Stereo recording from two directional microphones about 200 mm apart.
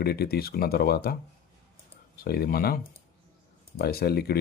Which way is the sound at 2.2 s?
50° left (ahead or behind).